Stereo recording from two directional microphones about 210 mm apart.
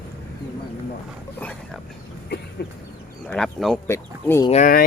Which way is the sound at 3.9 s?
10° left (ahead or behind).